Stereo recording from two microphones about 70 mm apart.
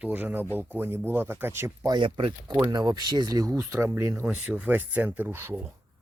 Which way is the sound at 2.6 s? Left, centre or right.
Right.